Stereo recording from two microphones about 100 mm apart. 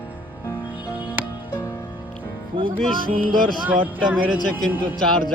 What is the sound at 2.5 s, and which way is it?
Music, 60° right (ahead or behind).